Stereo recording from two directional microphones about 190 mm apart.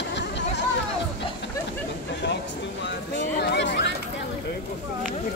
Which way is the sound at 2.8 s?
65° left (ahead or behind).